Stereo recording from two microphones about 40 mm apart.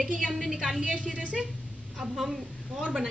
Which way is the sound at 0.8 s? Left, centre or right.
Right.